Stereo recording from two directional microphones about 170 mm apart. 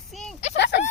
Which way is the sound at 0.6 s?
80° left.